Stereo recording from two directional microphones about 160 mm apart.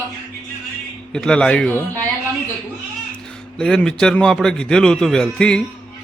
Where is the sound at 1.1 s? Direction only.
5° left (ahead or behind).